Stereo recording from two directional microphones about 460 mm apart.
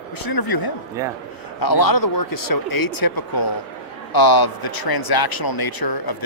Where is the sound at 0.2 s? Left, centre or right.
Left.